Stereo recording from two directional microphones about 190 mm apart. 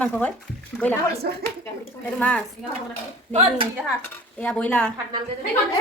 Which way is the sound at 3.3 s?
30° right (ahead or behind).